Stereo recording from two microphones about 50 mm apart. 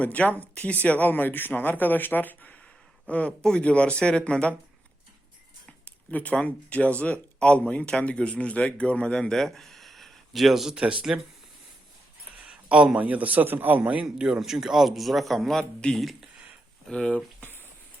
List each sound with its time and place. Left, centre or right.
0.0 s speech: left
3.1 s speech: left
5.8 s a sound: left
6.3 s speech: left
9.3 s a sound: centre
10.8 s speech: centre
12.5 s a sound: right
13.0 s a man's voice: right
13.8 s speech: right
14.3 s a man's voice: centre